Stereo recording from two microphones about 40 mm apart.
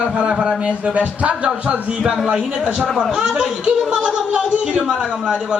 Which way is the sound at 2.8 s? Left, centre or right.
Centre.